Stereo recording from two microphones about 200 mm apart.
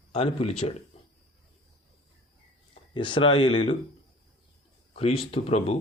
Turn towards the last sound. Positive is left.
turn(degrees=30)  # may be behind; listen again after turning